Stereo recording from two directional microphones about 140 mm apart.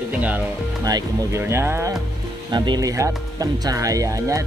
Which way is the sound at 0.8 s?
25° right (ahead or behind).